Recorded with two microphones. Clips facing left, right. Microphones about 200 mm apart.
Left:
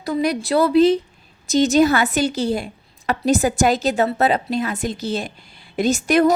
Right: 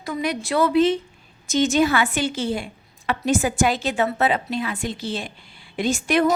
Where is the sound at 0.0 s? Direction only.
35° left (ahead or behind).